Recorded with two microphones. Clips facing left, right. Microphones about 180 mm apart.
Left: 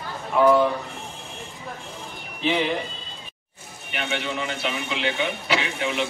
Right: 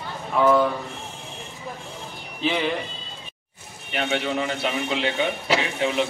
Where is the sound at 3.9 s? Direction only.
40° right (ahead or behind).